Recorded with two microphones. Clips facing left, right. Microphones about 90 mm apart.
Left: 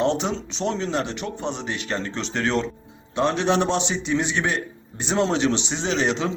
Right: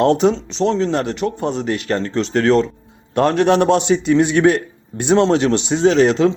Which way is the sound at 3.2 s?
55° right (ahead or behind).